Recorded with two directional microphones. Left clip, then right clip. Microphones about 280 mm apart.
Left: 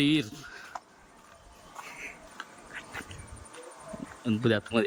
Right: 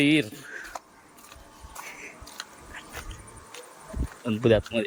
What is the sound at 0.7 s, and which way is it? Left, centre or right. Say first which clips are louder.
Keys jangling: right 2 dB; right.